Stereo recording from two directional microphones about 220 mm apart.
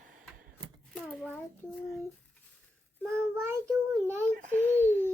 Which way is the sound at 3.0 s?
10° right (ahead or behind).